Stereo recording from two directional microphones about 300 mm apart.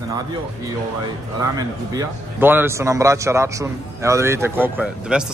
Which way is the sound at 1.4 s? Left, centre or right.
Centre.